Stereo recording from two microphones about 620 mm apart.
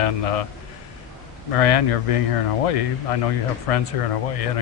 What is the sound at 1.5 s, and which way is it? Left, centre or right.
A man's voice, left.